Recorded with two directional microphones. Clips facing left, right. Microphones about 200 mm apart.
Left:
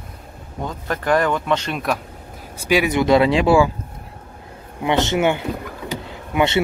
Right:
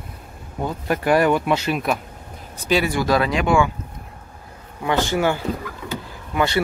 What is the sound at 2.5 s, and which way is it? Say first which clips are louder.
Speech: left 2 dB; 10° left (ahead or behind).